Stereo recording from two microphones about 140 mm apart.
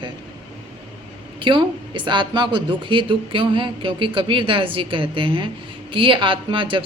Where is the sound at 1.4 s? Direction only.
35° right (ahead or behind).